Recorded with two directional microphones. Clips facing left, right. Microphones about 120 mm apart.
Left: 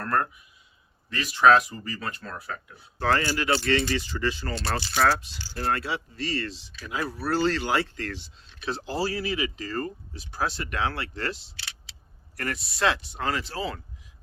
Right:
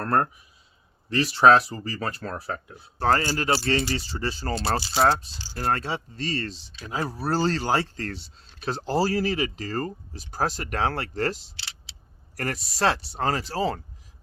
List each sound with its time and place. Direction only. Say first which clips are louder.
0.0 s speech: right 3 dB; 30° right (ahead or behind)
5.5 s speech: right 1 dB; 40° right (ahead or behind)